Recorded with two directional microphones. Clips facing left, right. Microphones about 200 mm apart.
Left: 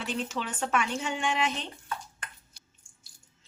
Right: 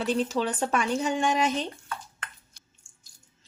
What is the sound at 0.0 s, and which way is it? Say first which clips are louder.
A woman's voice: right 7 dB; 35° right (ahead or behind).